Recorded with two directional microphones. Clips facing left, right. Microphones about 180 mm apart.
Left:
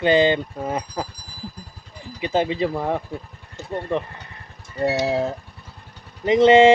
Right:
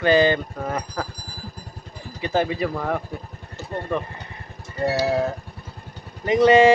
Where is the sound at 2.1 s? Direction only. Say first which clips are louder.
Left 1 dB; 20° left (ahead or behind).